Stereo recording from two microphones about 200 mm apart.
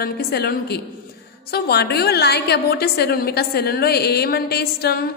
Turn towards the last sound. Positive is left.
turn(degrees=50)  # may be behind; listen again after turning